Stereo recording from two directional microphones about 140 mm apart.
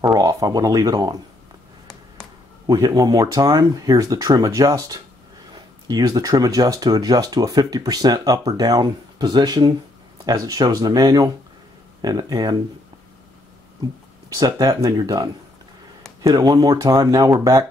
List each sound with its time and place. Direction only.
0.0 s speech: 25° right (ahead or behind)
2.6 s speech: 30° right (ahead or behind)
14.3 s speech: 30° right (ahead or behind)
16.3 s speech: 30° right (ahead or behind)